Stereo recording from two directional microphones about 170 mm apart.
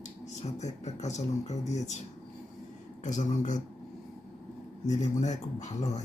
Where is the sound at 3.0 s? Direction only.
45° left (ahead or behind).